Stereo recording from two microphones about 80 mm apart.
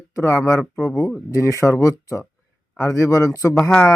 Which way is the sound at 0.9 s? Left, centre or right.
Centre.